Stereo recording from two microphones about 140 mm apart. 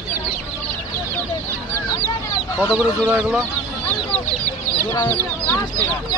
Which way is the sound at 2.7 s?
5° left (ahead or behind).